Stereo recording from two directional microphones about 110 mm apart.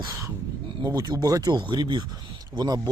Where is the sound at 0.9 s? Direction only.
35° right (ahead or behind).